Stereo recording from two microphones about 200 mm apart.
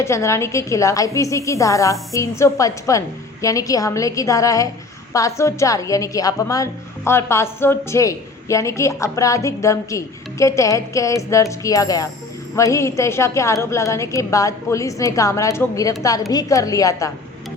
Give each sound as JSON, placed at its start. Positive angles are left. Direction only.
{"t": 0.0, "sound": "a woman's voice", "side_deg": 15}